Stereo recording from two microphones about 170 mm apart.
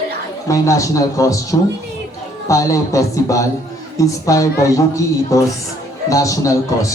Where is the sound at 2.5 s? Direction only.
20° left (ahead or behind).